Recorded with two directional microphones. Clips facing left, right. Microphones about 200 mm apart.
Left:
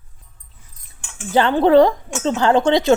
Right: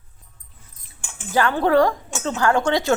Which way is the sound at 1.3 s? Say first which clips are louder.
Left 5 dB; 25° left (ahead or behind).